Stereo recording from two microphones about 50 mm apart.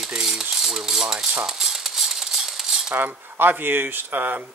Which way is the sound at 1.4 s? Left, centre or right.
Centre.